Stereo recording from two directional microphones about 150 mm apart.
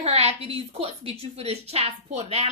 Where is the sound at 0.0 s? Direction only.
45° right (ahead or behind).